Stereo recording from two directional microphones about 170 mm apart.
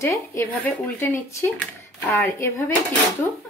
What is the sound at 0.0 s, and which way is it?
Speech, 15° left (ahead or behind).